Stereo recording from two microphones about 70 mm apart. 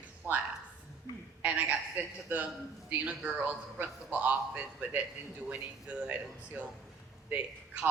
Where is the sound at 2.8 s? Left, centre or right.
Right.